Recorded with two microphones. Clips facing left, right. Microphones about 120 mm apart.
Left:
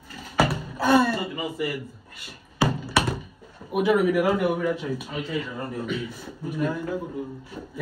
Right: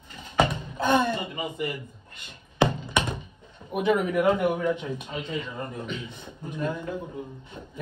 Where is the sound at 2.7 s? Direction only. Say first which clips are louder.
Left 3 dB; 20° right (ahead or behind).